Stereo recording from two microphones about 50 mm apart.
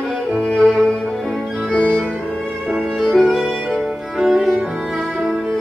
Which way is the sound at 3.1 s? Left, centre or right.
Centre.